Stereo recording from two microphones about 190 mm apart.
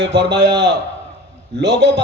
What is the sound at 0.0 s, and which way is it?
A man's voice, 65° right (ahead or behind).